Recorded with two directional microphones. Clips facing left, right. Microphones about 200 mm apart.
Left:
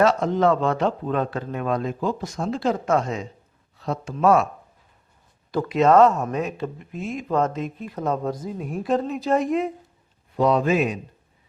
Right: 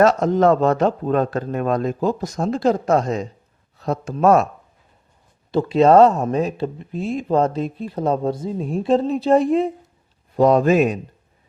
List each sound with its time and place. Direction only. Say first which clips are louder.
0.0 s speech: right 4 dB; 45° right (ahead or behind)
5.5 s speech: right 4 dB; 30° right (ahead or behind)
10.3 s speech: right 5 dB; 45° right (ahead or behind)